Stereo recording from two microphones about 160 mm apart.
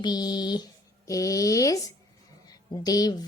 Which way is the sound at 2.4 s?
25° left (ahead or behind).